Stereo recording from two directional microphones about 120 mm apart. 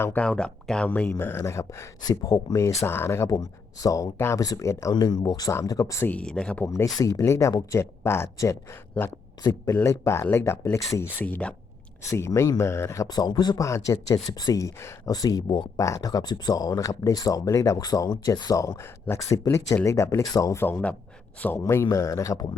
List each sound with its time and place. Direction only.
0.0 s speech: 10° left (ahead or behind)
6.1 s speech: 10° left (ahead or behind)
6.7 s speech: 25° left (ahead or behind)
12.1 s speech: 25° left (ahead or behind)